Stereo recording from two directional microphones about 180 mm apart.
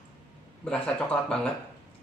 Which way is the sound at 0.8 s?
5° left (ahead or behind).